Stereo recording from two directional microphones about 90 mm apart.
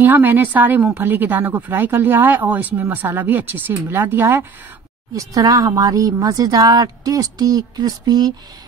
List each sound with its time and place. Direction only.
0.0 s speech: 20° right (ahead or behind)
5.1 s speech: 40° right (ahead or behind)